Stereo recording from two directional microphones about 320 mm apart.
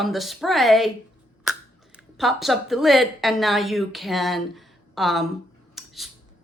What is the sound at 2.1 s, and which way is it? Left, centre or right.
Speech, centre.